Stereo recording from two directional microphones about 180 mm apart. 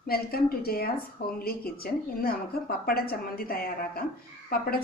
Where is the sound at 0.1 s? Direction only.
60° left (ahead or behind).